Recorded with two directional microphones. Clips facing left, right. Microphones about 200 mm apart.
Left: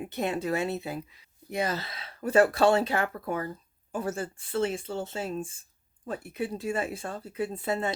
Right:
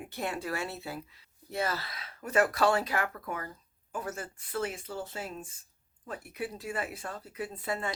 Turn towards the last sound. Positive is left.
turn(degrees=25)  # may be behind; listen again after turning